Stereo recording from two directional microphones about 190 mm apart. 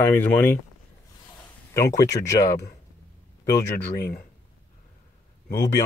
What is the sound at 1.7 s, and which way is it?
Speech, 15° left (ahead or behind).